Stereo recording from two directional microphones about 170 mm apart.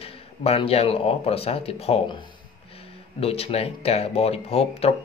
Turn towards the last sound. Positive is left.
turn(degrees=35)  # may be behind; listen again after turning